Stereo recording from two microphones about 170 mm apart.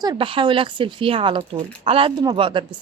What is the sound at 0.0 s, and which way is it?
A woman's voice, 25° right (ahead or behind).